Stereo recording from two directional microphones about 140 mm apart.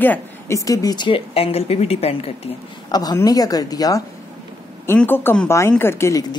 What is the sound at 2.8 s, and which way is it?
Speech, 30° left (ahead or behind).